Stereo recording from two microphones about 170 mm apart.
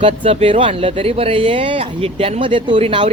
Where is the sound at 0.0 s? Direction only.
35° right (ahead or behind).